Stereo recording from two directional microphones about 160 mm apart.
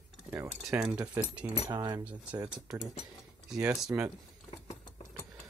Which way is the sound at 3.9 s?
15° right (ahead or behind).